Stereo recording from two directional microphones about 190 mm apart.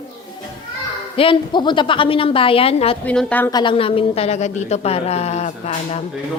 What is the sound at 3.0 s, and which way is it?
Speech, 5° left (ahead or behind).